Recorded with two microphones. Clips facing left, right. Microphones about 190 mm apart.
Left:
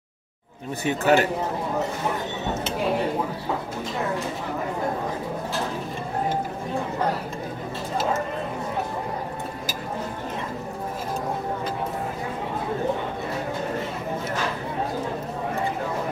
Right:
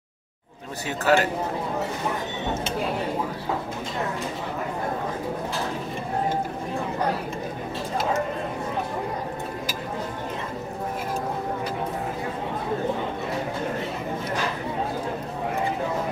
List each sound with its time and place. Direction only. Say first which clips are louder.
0.8 s a man's voice: left 2 dB; 20° left (ahead or behind)